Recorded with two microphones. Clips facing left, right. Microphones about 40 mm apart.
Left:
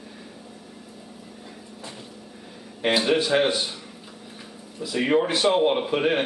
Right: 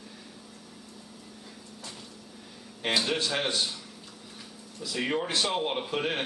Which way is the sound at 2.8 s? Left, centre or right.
Centre.